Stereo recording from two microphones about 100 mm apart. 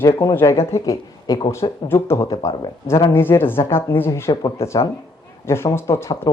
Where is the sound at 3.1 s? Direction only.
25° left (ahead or behind).